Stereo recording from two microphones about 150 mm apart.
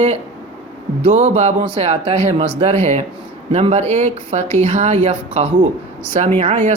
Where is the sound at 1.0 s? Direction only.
45° right (ahead or behind).